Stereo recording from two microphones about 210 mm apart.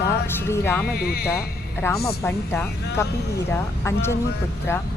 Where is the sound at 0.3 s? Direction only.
10° left (ahead or behind).